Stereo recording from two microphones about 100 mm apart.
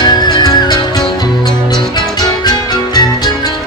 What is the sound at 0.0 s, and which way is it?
Music, 45° left (ahead or behind).